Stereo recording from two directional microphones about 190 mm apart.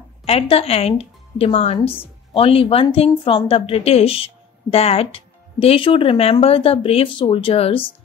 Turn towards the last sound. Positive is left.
turn(degrees=30)  # may be behind; listen again after turning